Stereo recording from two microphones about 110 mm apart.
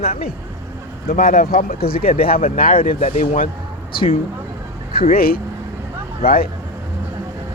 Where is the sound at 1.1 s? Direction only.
90° left.